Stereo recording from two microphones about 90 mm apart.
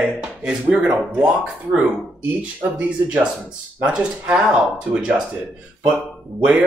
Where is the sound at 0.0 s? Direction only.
10° right (ahead or behind).